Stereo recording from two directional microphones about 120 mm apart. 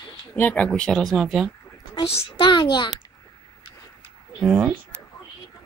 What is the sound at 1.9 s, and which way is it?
A woman's voice, 50° left (ahead or behind).